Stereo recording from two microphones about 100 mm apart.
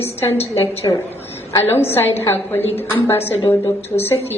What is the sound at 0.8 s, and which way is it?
Speech, 35° left (ahead or behind).